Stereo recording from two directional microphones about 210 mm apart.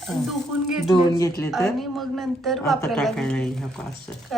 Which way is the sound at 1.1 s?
15° left (ahead or behind).